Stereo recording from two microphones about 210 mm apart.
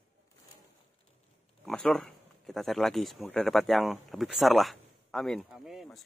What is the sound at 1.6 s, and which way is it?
Speech, centre (ahead or behind).